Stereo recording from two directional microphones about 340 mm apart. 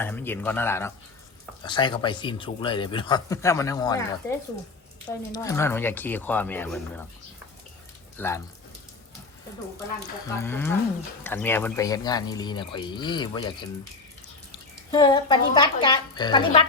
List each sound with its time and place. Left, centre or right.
0.0 s speech: centre
5.3 s speech: centre
8.2 s speech: centre
10.2 s speech: centre
14.8 s speech: centre